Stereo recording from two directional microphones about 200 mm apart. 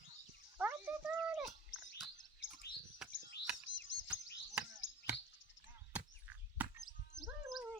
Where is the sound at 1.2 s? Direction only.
5° right (ahead or behind).